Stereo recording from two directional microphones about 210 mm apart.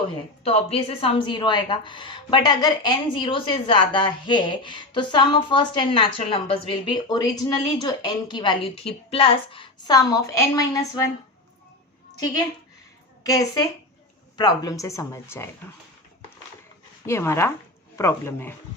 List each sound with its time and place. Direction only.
0.4 s a woman's voice: 30° left (ahead or behind)
13.2 s speech: 15° left (ahead or behind)
17.1 s speech: 15° left (ahead or behind)